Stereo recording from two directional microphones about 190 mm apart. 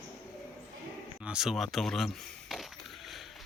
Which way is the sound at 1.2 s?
5° right (ahead or behind).